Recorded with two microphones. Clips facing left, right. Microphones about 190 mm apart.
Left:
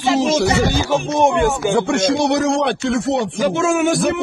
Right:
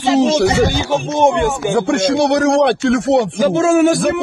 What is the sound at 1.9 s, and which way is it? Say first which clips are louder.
Speech: right 2 dB; 55° right (ahead or behind).